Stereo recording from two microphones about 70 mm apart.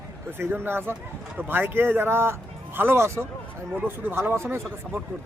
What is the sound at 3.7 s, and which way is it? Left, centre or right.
Speech, right.